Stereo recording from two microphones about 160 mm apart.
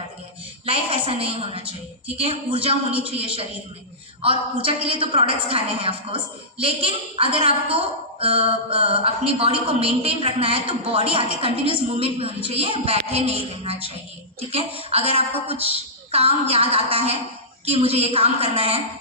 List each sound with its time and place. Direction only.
0.6 s a woman's voice: 35° right (ahead or behind)